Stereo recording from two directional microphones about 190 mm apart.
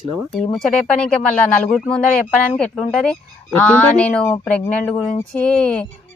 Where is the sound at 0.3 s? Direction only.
Centre (ahead or behind).